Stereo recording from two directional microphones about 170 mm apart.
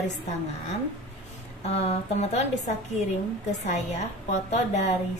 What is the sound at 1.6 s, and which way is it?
A woman's voice, 40° left (ahead or behind).